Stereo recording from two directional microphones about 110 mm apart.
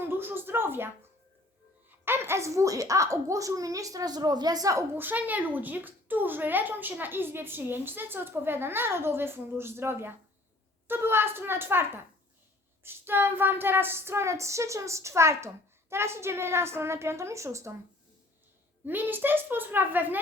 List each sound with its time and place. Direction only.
0.0 s a sound: 20° right (ahead or behind)
2.0 s a woman's voice: 20° right (ahead or behind)
18.9 s a woman's voice: 15° right (ahead or behind)